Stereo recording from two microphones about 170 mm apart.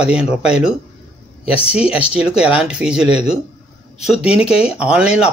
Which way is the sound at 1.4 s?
35° left (ahead or behind).